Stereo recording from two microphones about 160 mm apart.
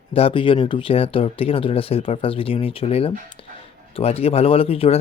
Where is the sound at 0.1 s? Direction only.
35° left (ahead or behind).